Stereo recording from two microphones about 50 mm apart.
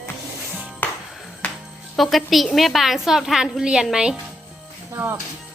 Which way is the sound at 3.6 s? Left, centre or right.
Centre.